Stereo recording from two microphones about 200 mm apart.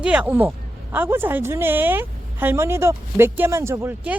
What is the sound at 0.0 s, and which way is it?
Speech, 5° right (ahead or behind).